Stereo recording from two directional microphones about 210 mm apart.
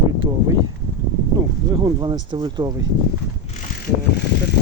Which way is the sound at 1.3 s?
20° right (ahead or behind).